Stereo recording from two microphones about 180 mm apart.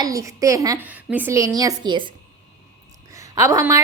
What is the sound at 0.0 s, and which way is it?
A woman's voice, 20° right (ahead or behind).